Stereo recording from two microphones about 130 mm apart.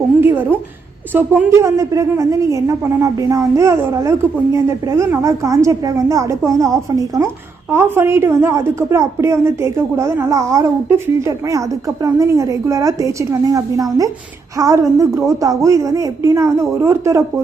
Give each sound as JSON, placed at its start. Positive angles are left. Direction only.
{"t": 0.2, "sound": "a woman's voice", "side_deg": -15}